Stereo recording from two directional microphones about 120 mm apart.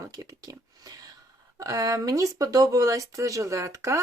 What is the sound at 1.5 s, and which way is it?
Speech, 30° right (ahead or behind).